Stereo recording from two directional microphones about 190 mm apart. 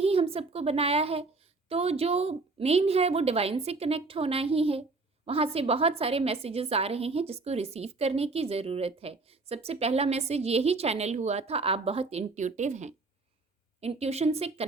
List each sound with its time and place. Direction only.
0.0 s a woman's voice: 30° right (ahead or behind)